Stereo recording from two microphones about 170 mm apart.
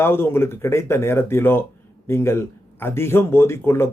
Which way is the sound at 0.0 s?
15° left (ahead or behind).